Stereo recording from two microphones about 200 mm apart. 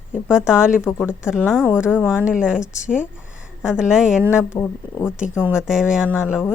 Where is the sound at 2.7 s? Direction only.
40° left (ahead or behind).